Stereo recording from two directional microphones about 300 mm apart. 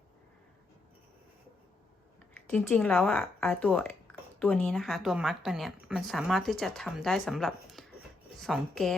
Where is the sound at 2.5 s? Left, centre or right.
Centre.